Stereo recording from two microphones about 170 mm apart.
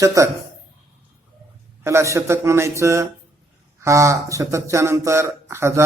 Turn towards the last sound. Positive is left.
turn(degrees=-15)  # may be behind; listen again after turning